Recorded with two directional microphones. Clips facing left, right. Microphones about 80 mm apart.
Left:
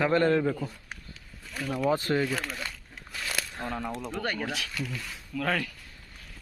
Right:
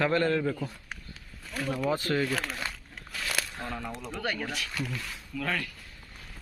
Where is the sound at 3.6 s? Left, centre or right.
Left.